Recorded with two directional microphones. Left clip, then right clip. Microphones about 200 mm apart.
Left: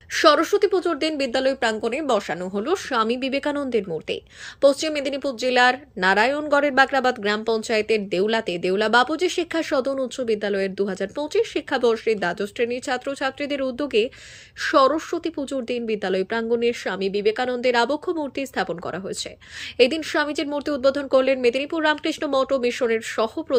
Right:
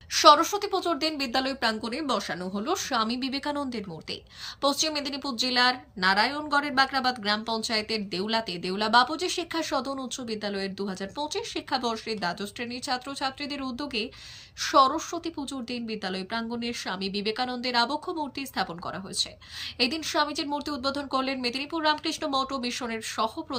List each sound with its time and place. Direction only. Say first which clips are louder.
0.1 s a woman's voice: left 2 dB; 10° left (ahead or behind)